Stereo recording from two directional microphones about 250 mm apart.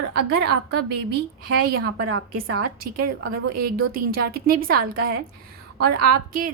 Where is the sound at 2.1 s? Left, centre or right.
Right.